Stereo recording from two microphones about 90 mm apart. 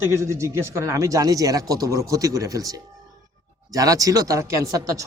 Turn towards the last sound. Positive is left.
turn(degrees=-40)  # may be behind; listen again after turning